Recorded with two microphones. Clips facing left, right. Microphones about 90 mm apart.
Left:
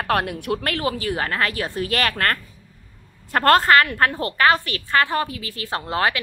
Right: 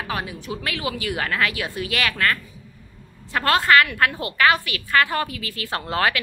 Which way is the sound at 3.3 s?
45° left (ahead or behind).